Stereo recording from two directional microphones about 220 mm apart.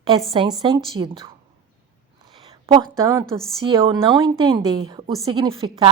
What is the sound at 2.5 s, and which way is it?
A woman's voice, 15° right (ahead or behind).